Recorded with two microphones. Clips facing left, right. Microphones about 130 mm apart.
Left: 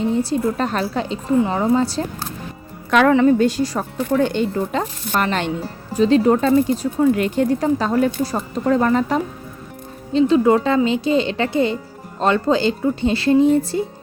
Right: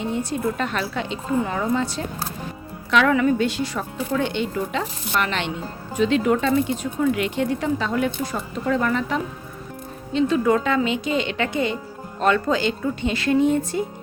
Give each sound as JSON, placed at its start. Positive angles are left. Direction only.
{"t": 0.0, "sound": "speech", "side_deg": 35}
{"t": 3.1, "sound": "speech", "side_deg": 35}